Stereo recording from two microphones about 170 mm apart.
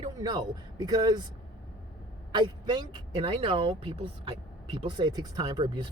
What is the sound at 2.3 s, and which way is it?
Speech, 25° right (ahead or behind).